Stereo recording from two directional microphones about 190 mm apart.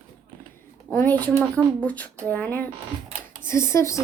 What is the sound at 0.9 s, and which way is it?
A woman's voice, 10° left (ahead or behind).